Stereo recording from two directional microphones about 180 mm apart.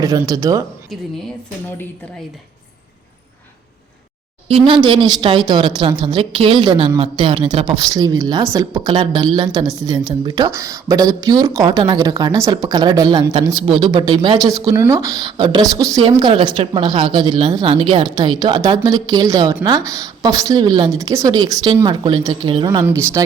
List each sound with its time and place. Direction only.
0.0 s speech: 20° right (ahead or behind)
4.4 s speech: 30° right (ahead or behind)